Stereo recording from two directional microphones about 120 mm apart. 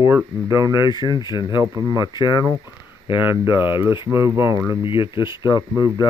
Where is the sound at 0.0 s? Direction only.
30° right (ahead or behind).